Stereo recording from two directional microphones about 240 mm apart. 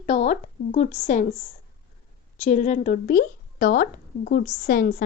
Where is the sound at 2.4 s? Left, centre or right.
Left.